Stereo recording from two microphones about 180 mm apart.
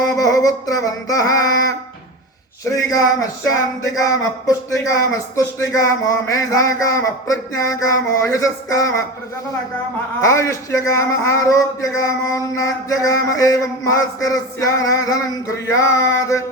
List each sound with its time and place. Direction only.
0.1 s music: 20° left (ahead or behind)
2.6 s speech: 20° left (ahead or behind)
10.2 s speech: 15° left (ahead or behind)